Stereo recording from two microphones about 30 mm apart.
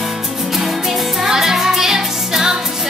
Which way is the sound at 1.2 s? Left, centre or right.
Centre.